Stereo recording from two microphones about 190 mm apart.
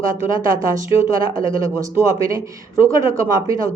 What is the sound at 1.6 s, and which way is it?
Speech, 15° right (ahead or behind).